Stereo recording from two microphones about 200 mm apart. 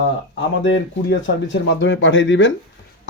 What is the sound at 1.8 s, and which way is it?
Speech, 65° left (ahead or behind).